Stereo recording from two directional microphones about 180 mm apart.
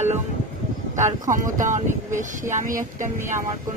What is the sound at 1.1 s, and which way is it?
Speech, 45° right (ahead or behind).